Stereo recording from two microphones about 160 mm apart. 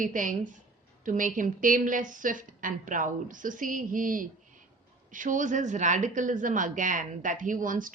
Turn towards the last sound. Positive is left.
turn(degrees=-55)  # may be behind; listen again after turning